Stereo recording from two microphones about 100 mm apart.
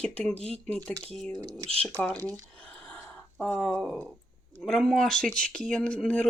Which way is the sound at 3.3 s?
5° left (ahead or behind).